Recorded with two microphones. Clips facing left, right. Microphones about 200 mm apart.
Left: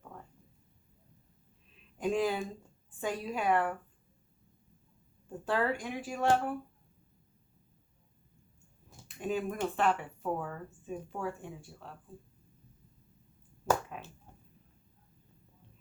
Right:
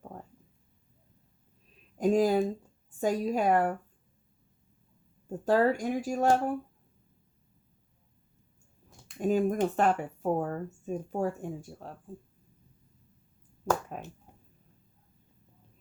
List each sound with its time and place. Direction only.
0.0 s a sound: 35° right (ahead or behind)
2.0 s speech: 40° right (ahead or behind)
5.5 s speech: 40° right (ahead or behind)
9.1 s speech: 40° right (ahead or behind)
13.9 s speech: 45° right (ahead or behind)